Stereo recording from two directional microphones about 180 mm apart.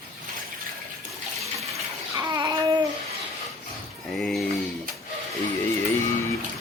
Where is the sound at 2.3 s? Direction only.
25° right (ahead or behind).